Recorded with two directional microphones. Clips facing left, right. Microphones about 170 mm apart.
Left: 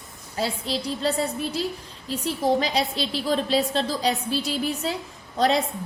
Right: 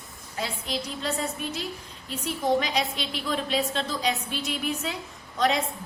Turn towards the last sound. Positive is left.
turn(degrees=35)  # may be behind; listen again after turning